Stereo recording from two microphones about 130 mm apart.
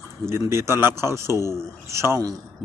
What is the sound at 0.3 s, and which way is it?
A man's voice, 20° right (ahead or behind).